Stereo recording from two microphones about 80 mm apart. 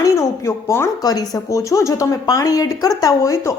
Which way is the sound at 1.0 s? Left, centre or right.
Left.